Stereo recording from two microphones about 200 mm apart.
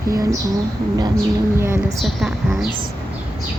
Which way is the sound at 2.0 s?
Centre (ahead or behind).